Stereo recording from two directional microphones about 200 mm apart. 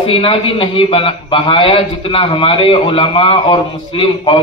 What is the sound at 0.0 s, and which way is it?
A man's voice, 25° left (ahead or behind).